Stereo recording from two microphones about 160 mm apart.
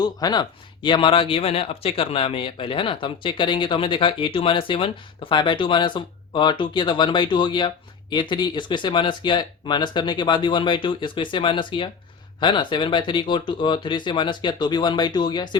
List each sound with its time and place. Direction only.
0.0 s speech: 25° left (ahead or behind)